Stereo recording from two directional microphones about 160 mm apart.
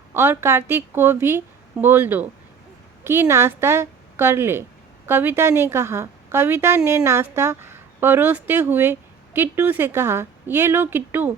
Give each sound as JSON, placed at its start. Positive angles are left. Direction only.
{"t": 0.1, "sound": "a woman's voice", "side_deg": -15}